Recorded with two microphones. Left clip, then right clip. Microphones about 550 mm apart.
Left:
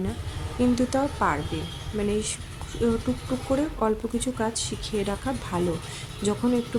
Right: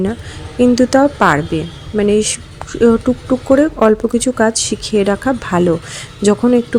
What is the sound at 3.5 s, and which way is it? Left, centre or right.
Speech, left.